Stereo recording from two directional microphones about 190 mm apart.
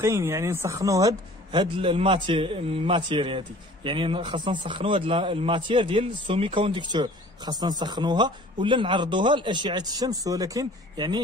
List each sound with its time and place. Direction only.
0.0 s speech: 15° right (ahead or behind)